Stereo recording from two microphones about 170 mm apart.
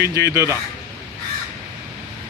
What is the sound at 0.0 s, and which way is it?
Speech, 20° right (ahead or behind).